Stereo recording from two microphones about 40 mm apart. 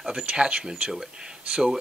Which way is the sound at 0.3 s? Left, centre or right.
Right.